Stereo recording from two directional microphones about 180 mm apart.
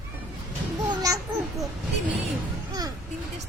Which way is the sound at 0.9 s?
20° right (ahead or behind).